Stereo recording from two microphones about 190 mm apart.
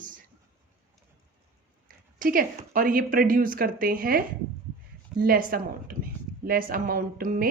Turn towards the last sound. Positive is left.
turn(degrees=-50)  # may be behind; listen again after turning